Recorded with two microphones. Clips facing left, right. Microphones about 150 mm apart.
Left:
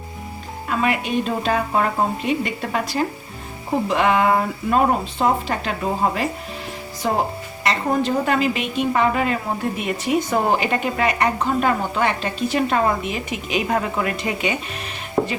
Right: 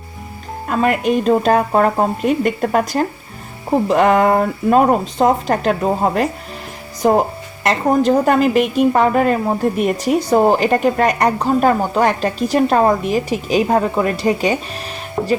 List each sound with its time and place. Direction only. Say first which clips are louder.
0.7 s a woman's voice: right 6 dB; 45° right (ahead or behind)